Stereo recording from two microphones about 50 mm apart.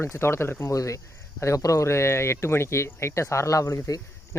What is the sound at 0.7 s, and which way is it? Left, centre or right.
Speech, left.